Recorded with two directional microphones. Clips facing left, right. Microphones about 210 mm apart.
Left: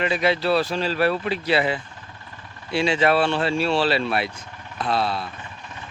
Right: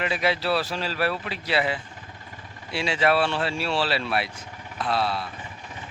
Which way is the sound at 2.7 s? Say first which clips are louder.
Left 3 dB; 5° right (ahead or behind).